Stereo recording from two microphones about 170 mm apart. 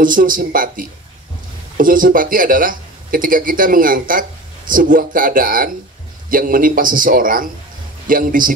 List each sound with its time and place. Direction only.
0.0 s speech: 55° right (ahead or behind)